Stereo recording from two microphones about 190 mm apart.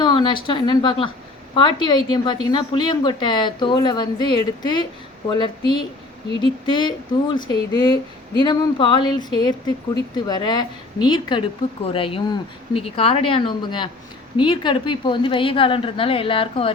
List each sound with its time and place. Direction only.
0.0 s a woman's voice: 25° left (ahead or behind)